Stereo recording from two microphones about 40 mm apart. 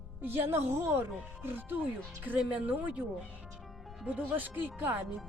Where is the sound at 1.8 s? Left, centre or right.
Right.